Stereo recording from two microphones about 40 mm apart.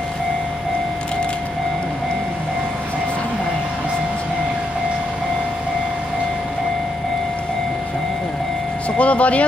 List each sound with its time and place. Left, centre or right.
8.9 s speech: left